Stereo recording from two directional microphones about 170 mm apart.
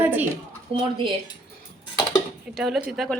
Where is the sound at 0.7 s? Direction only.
30° right (ahead or behind).